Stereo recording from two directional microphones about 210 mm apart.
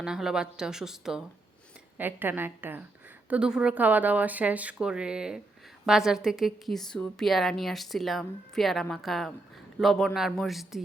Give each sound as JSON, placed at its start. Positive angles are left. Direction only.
{"t": 0.0, "sound": "a woman's voice", "side_deg": -5}